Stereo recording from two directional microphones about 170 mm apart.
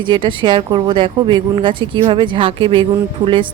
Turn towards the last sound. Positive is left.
turn(degrees=-30)  # may be behind; listen again after turning